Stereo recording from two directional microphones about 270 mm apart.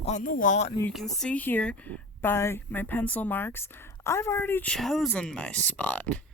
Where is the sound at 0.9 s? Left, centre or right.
Centre.